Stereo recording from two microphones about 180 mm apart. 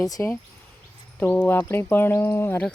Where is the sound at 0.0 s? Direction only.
15° left (ahead or behind).